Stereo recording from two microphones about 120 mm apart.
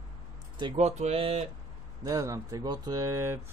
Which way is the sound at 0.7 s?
65° right (ahead or behind).